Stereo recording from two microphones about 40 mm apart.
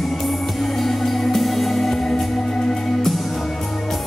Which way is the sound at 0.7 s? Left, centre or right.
Centre.